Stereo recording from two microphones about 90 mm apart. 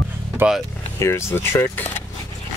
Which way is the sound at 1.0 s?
30° left (ahead or behind).